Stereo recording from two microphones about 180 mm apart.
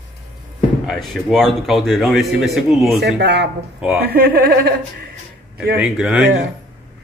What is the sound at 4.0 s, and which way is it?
Speech, 60° right (ahead or behind).